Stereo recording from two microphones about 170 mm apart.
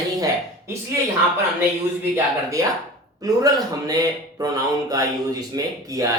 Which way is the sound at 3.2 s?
20° right (ahead or behind).